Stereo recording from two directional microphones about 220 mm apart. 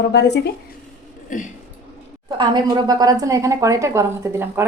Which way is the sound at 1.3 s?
35° left (ahead or behind).